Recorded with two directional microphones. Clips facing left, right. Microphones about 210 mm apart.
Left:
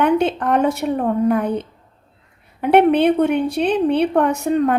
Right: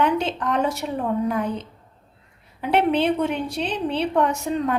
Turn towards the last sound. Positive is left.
turn(degrees=55)  # may be behind; listen again after turning